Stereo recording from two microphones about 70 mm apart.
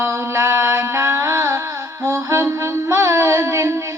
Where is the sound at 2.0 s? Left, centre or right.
Right.